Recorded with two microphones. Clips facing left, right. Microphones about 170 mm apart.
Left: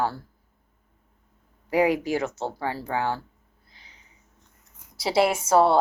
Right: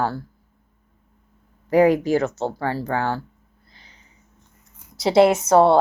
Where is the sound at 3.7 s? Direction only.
10° left (ahead or behind).